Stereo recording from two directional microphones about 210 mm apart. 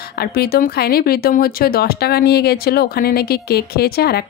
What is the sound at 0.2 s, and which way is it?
Speech, 45° left (ahead or behind).